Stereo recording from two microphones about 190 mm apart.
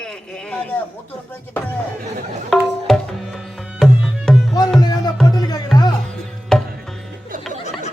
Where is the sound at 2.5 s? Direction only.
Centre (ahead or behind).